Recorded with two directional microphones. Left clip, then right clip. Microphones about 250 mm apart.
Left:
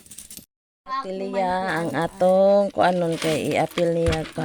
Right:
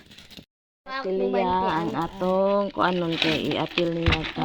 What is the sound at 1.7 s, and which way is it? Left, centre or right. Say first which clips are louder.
Speech: left 2 dB; left.